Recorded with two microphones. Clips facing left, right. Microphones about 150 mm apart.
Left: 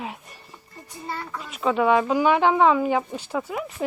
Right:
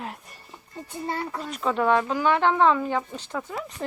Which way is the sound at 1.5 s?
5° left (ahead or behind).